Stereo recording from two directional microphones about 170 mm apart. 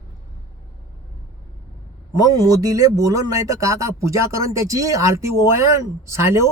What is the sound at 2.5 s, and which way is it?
Speech, 20° right (ahead or behind).